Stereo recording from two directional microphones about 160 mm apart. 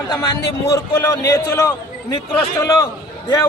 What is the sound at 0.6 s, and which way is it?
A man's voice, 20° left (ahead or behind).